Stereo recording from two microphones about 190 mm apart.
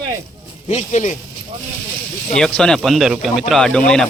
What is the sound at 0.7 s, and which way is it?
Speech, 35° left (ahead or behind).